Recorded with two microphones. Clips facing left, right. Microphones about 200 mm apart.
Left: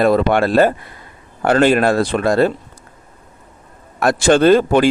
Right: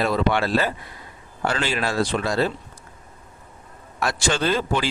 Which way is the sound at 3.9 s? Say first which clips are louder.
Left 11 dB; 55° left (ahead or behind).